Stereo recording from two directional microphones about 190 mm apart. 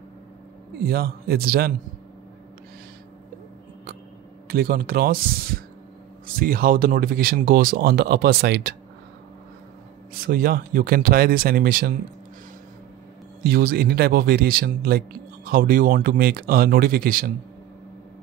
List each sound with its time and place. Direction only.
0.7 s speech: 55° right (ahead or behind)
4.5 s speech: 50° right (ahead or behind)
10.2 s speech: 50° right (ahead or behind)
13.4 s speech: 55° right (ahead or behind)